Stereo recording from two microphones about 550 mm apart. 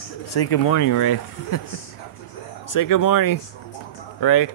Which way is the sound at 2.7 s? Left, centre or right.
Left.